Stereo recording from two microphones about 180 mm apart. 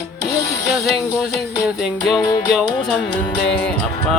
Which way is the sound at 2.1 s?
20° left (ahead or behind).